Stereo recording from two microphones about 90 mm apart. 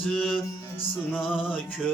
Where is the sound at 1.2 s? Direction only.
5° right (ahead or behind).